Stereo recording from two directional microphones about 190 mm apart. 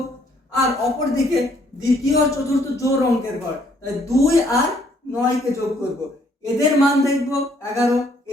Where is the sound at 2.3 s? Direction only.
15° left (ahead or behind).